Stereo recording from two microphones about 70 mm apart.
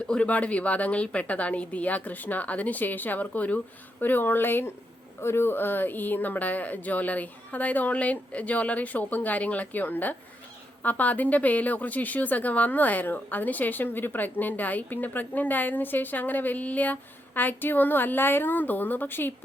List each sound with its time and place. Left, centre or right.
0.1 s a woman's voice: centre